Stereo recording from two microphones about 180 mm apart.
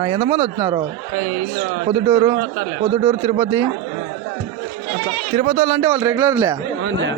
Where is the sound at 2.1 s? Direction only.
25° right (ahead or behind).